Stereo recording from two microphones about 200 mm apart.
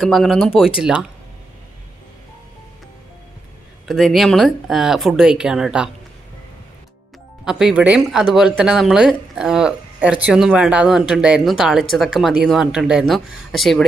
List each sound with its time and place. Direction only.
0.0 s speech: centre (ahead or behind)
3.8 s speech: centre (ahead or behind)
7.4 s speech: centre (ahead or behind)